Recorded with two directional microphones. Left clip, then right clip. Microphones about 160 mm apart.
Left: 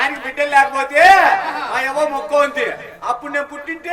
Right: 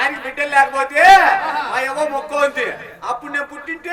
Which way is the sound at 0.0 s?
40° left (ahead or behind).